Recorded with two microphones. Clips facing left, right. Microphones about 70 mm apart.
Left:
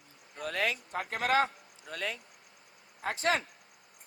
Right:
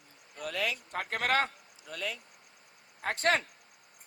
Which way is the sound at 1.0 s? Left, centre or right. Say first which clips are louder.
Left 1 dB; right.